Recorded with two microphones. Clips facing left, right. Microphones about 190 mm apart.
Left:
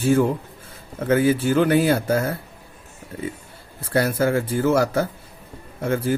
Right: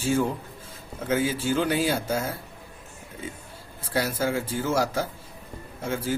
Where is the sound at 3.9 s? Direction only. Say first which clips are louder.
Left 6 dB; 60° left (ahead or behind).